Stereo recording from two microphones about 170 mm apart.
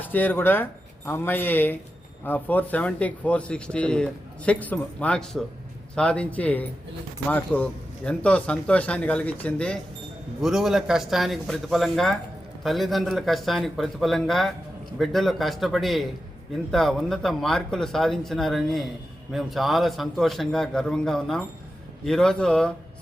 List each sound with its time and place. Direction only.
0.0 s speech: 10° left (ahead or behind)